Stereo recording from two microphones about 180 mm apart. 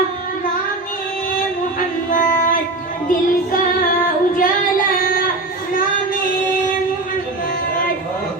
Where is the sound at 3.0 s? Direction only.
50° left (ahead or behind).